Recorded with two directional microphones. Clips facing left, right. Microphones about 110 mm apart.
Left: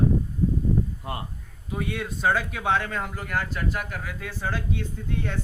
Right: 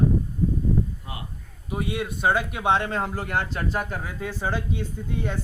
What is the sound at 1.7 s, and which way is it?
A man's voice, 15° right (ahead or behind).